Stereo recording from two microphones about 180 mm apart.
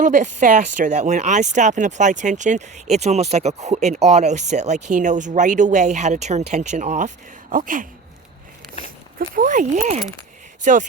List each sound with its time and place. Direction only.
0.0 s speech: 45° right (ahead or behind)
9.1 s speech: 50° right (ahead or behind)